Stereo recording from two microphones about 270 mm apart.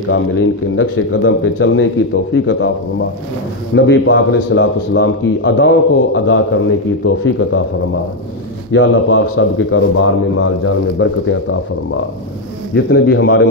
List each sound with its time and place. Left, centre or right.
0.1 s speech: left
8.7 s speech: left
12.7 s speech: left